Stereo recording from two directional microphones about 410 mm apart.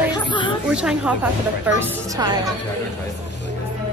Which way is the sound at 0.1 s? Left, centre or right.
Centre.